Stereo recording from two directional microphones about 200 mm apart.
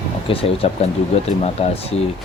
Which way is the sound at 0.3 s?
30° left (ahead or behind).